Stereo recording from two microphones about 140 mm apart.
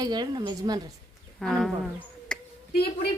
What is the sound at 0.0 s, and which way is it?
Speech, 30° right (ahead or behind).